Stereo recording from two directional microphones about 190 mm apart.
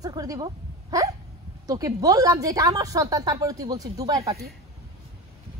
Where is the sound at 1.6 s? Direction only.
20° right (ahead or behind).